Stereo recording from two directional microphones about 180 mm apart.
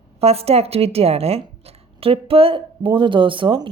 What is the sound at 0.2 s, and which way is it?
Speech, 35° right (ahead or behind).